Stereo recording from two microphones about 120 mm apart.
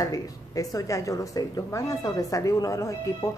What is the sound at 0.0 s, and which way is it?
Speech, 30° left (ahead or behind).